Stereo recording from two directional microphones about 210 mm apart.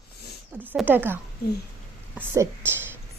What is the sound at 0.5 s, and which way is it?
Speech, 10° right (ahead or behind).